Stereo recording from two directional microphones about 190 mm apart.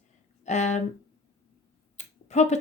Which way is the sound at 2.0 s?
35° left (ahead or behind).